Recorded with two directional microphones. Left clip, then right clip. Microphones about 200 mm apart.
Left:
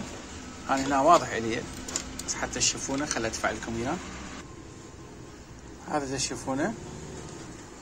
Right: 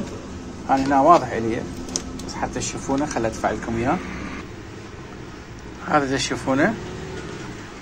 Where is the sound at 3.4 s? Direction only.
10° left (ahead or behind).